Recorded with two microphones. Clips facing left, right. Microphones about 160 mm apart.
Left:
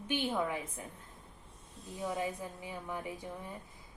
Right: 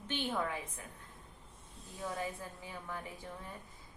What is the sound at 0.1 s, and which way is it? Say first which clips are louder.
Speech: left 3 dB; 15° left (ahead or behind).